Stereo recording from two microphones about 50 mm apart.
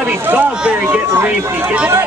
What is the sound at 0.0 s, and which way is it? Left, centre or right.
Speech, right.